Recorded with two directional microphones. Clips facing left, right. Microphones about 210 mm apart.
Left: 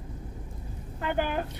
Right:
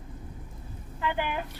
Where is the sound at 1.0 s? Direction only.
45° left (ahead or behind).